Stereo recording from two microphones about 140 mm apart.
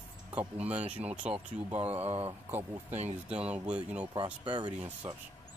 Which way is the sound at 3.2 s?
10° right (ahead or behind).